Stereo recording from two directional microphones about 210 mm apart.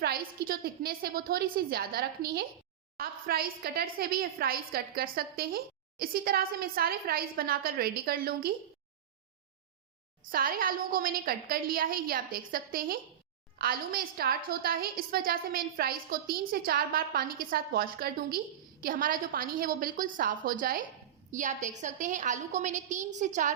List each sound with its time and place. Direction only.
0.0 s a woman's voice: 45° right (ahead or behind)
10.3 s a woman's voice: 45° right (ahead or behind)